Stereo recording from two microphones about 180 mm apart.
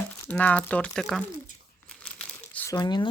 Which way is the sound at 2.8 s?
25° left (ahead or behind).